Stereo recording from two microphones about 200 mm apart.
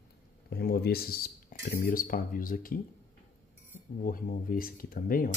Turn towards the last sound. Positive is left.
turn(degrees=45)  # may be behind; listen again after turning